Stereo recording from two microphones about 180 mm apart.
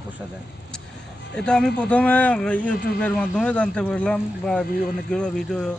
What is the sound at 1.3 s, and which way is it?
A man's voice, 5° left (ahead or behind).